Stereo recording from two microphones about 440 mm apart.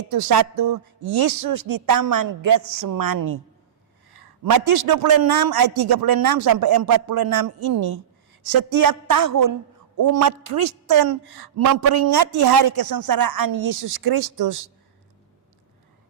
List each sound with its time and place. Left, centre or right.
0.1 s a man's voice: right
4.4 s a man's voice: right